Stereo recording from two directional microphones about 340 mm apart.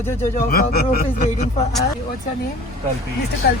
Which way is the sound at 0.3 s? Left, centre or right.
Left.